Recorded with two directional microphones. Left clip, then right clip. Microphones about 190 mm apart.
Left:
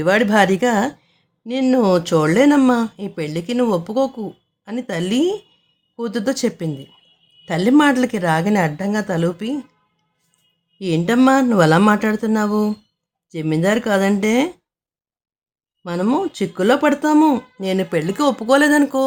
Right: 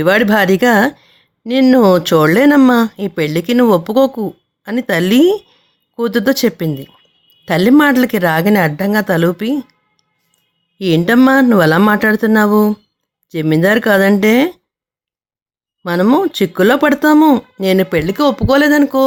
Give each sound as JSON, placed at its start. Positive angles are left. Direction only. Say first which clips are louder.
{"t": 0.0, "sound": "speech", "louder": "right 3 dB", "side_deg": -25}
{"t": 10.8, "sound": "speech", "louder": "right 6 dB", "side_deg": -25}
{"t": 15.8, "sound": "speech", "louder": "right 7 dB", "side_deg": -25}